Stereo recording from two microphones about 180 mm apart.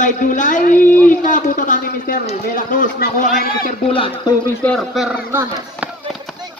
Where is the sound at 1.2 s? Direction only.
45° left (ahead or behind).